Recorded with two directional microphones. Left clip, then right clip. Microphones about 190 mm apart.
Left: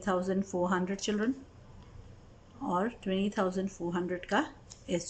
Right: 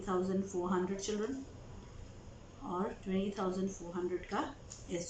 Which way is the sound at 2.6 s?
55° left (ahead or behind).